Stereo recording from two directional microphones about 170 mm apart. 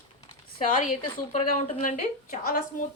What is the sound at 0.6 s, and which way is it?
A woman's voice, 50° left (ahead or behind).